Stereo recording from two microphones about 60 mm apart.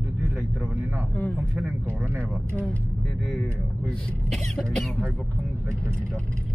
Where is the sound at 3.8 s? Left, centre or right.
Centre.